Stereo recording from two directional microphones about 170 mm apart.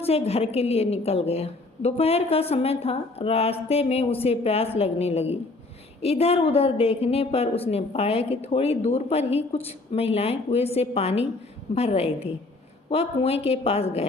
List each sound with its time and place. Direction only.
0.0 s a woman's voice: 35° left (ahead or behind)